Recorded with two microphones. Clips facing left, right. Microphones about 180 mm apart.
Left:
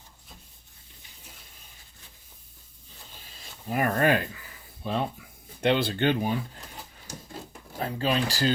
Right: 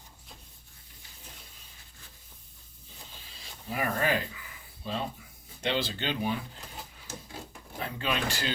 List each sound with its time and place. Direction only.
3.7 s speech: 55° left (ahead or behind)
7.8 s speech: 35° left (ahead or behind)